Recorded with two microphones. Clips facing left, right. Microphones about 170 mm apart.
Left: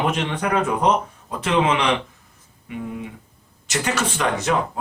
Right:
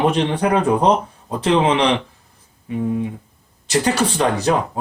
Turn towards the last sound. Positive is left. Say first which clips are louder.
# right 4 dB
turn(degrees=-35)  # may be behind; listen again after turning